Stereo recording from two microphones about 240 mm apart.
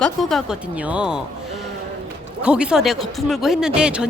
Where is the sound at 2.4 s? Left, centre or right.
Centre.